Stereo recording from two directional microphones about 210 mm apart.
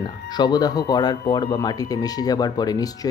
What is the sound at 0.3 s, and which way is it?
Speech, 20° left (ahead or behind).